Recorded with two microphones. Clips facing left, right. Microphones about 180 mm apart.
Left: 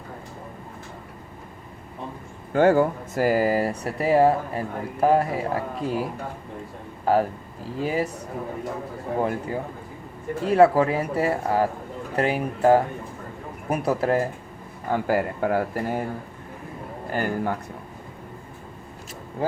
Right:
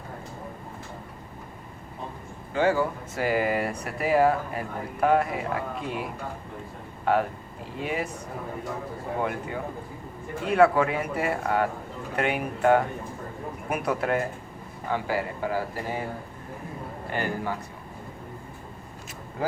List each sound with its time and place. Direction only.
2.5 s speech: 50° left (ahead or behind); by 8.1 s 35° left (ahead or behind)
9.1 s speech: 35° left (ahead or behind)
14.8 s speech: 50° left (ahead or behind)
17.1 s speech: 45° left (ahead or behind)